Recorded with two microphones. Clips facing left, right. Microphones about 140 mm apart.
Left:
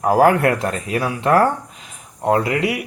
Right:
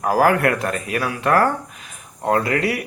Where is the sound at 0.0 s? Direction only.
25° left (ahead or behind).